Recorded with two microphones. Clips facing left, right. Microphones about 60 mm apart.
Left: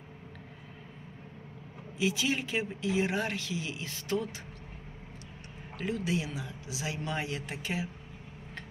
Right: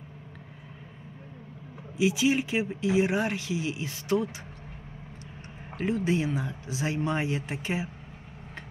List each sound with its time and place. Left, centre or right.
2.0 s speech: centre
5.8 s speech: right